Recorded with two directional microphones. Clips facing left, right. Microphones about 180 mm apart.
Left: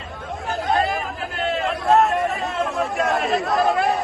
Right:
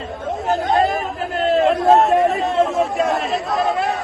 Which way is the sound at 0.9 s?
Centre (ahead or behind).